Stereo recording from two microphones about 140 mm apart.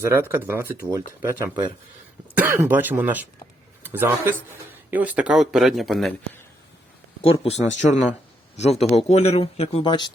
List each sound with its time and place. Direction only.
0.0 s speech: 15° right (ahead or behind); by 6.1 s centre (ahead or behind)
7.2 s speech: 45° left (ahead or behind)